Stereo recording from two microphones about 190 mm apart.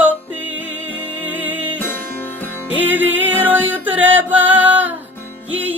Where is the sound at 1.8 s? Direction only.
10° left (ahead or behind).